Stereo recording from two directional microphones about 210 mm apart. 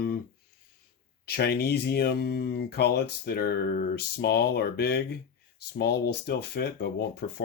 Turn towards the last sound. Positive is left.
turn(degrees=50)  # may be behind; listen again after turning